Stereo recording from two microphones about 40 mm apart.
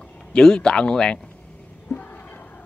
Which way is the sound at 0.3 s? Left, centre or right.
Centre.